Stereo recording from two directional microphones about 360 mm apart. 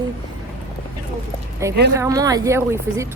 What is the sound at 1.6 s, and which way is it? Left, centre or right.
Speech, centre.